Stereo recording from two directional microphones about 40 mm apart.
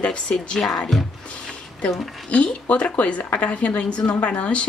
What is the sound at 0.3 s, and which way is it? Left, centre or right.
Speech, left.